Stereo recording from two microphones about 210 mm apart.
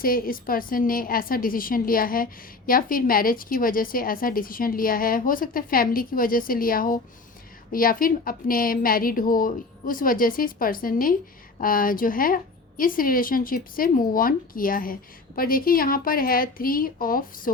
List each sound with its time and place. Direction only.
0.0 s a woman's voice: 45° left (ahead or behind)